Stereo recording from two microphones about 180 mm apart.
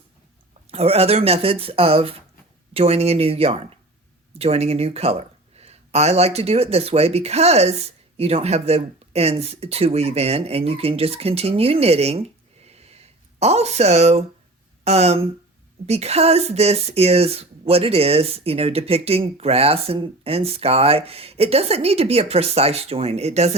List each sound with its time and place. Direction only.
0.7 s speech: 35° right (ahead or behind)
12.6 s a sound: 35° right (ahead or behind)
14.8 s speech: 35° right (ahead or behind)